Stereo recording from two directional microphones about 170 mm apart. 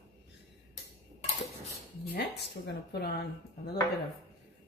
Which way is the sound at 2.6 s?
75° left (ahead or behind).